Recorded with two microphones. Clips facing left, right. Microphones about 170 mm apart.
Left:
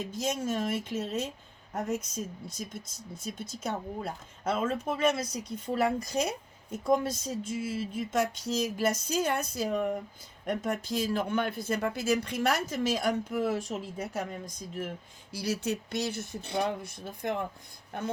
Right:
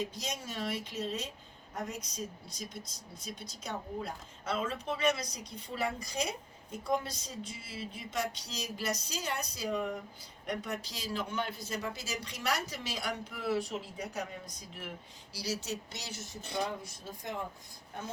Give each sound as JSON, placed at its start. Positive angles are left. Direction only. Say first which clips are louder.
{"t": 0.1, "sound": "speech", "louder": "left 10 dB", "side_deg": 50}
{"t": 14.8, "sound": "speech", "louder": "left 8 dB", "side_deg": 50}